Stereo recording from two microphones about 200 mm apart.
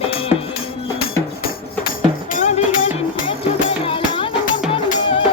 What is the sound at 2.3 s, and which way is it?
Music, 40° left (ahead or behind).